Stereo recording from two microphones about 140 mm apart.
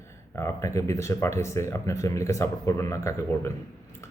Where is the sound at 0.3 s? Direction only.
20° left (ahead or behind).